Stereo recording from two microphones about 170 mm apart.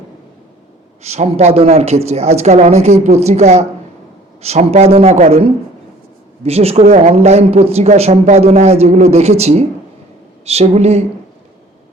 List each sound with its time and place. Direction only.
1.0 s speech: 40° right (ahead or behind)